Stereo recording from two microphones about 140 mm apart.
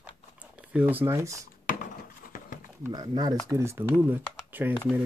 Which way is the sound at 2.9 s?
30° right (ahead or behind).